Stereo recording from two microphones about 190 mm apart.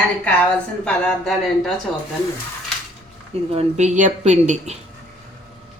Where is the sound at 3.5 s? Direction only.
40° right (ahead or behind).